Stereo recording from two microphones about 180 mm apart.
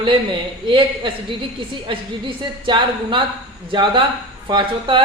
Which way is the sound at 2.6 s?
25° right (ahead or behind).